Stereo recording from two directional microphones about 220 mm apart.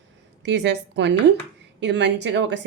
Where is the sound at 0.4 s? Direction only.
50° right (ahead or behind).